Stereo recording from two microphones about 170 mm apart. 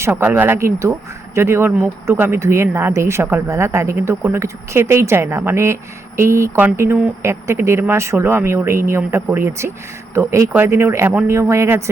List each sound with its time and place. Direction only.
0.1 s speech: 10° right (ahead or behind)